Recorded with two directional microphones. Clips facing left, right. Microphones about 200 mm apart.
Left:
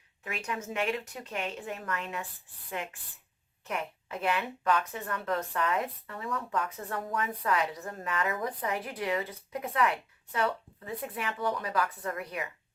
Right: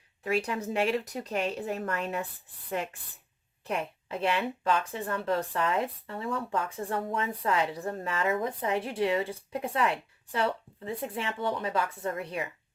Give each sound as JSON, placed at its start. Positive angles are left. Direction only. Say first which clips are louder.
{"t": 0.3, "sound": "a woman's voice", "louder": "right 7 dB", "side_deg": -35}